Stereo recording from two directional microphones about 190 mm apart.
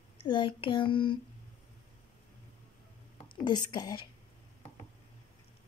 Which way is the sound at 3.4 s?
20° left (ahead or behind).